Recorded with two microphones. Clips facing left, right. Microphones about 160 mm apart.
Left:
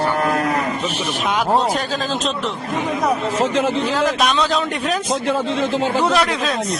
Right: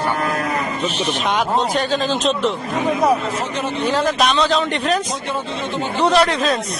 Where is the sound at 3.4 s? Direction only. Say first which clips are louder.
Left 6 dB; 90° left.